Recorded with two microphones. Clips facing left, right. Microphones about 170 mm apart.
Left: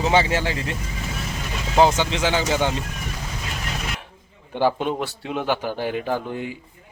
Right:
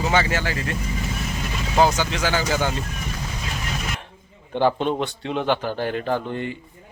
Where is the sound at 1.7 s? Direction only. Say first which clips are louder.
Left 2 dB; 25° left (ahead or behind).